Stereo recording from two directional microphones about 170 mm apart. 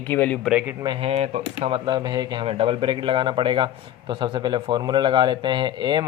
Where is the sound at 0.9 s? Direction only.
35° right (ahead or behind).